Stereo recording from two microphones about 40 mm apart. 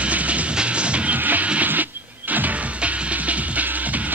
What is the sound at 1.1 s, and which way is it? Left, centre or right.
Music, right.